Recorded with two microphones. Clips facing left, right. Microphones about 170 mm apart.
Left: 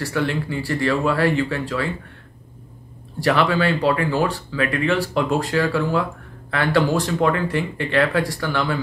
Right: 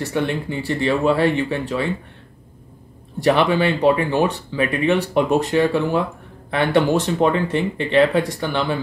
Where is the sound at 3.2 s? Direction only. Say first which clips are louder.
Right 2 dB; 20° right (ahead or behind).